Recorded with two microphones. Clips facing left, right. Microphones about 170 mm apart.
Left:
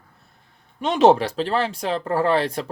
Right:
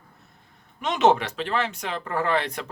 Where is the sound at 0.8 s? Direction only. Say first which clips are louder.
Left 5 dB; 35° left (ahead or behind).